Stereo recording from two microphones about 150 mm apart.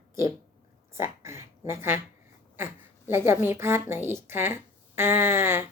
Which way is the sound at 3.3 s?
15° right (ahead or behind).